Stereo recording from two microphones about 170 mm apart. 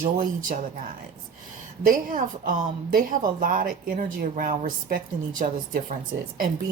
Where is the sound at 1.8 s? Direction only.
55° right (ahead or behind).